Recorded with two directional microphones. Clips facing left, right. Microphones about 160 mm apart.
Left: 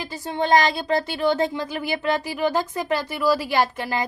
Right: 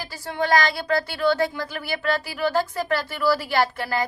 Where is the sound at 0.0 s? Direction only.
20° left (ahead or behind).